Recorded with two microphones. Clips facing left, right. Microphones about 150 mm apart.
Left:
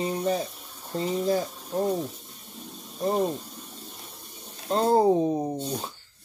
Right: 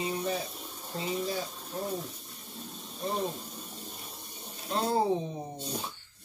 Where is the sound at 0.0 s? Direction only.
40° left (ahead or behind).